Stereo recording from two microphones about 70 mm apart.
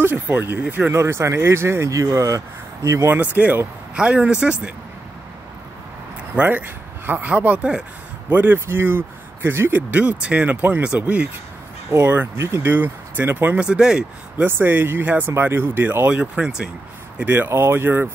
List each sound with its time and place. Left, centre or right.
0.0 s speech: right
0.9 s speech: right
1.9 s speech: right
3.1 s speech: right
6.3 s speech: right
8.3 s speech: right
11.9 s speech: right
13.7 s speech: centre
14.4 s speech: right
17.2 s speech: right